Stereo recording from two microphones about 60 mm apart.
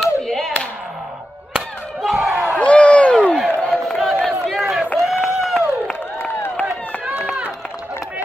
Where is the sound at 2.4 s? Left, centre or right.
Centre.